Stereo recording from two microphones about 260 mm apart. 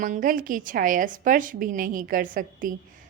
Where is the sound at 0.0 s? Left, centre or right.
Right.